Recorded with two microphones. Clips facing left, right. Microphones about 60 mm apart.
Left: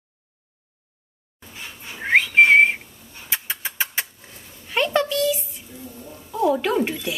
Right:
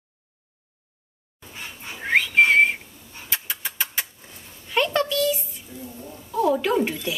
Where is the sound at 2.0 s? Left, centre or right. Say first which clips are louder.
Left 3 dB; left.